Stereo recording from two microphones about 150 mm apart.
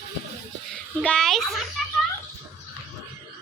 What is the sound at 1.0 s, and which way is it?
Speech, 5° left (ahead or behind).